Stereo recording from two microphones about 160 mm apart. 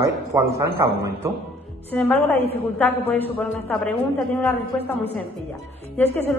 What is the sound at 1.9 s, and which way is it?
A woman's voice, 10° left (ahead or behind).